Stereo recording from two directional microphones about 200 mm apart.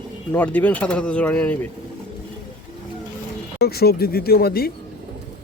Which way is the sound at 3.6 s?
50° left (ahead or behind).